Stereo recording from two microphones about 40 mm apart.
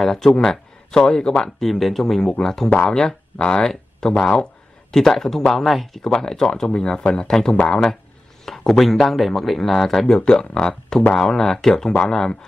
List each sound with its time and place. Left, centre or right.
0.0 s speech: centre
1.6 s speech: centre
6.1 s speech: centre